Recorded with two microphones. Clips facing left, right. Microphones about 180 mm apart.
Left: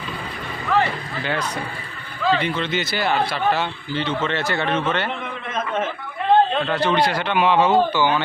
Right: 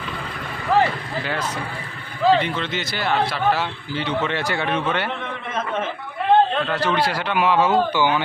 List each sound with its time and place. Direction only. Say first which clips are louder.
0.7 s a sound: right 2 dB; 35° right (ahead or behind)
1.2 s a man's voice: left 2 dB; centre (ahead or behind)
6.7 s a man's voice: left 4 dB; 5° right (ahead or behind)